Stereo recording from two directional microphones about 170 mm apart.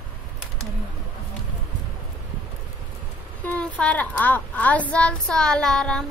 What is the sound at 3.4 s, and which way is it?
A child's voice, 10° left (ahead or behind).